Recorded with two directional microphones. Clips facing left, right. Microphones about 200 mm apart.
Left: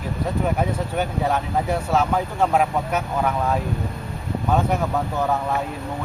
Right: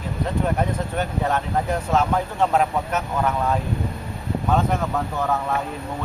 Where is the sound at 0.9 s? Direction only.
10° left (ahead or behind).